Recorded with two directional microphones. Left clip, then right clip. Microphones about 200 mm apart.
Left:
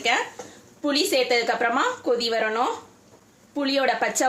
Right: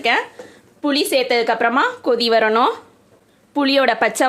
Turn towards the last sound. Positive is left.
turn(degrees=-45)  # may be behind; listen again after turning